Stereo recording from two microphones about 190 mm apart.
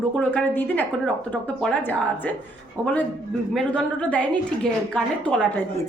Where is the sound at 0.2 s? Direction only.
10° left (ahead or behind).